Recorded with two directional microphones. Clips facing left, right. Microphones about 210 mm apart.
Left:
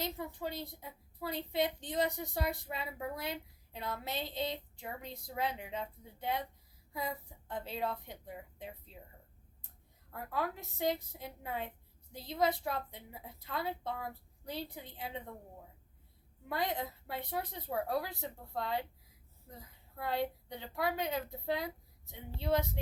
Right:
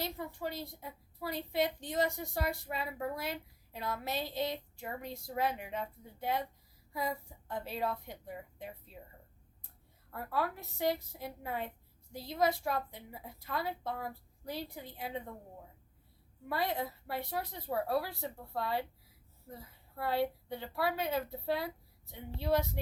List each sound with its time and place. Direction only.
0.0 s speech: 20° left (ahead or behind)
10.1 s speech: 20° left (ahead or behind)
16.5 s speech: 20° left (ahead or behind)
20.0 s speech: 20° left (ahead or behind)